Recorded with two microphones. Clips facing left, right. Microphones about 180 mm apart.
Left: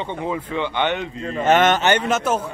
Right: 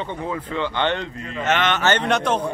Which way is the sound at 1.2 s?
40° left (ahead or behind).